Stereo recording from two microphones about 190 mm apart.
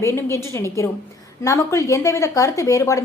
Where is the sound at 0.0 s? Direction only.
15° left (ahead or behind).